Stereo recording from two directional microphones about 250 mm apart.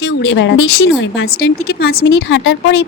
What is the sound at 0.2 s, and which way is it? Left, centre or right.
A woman's voice, left.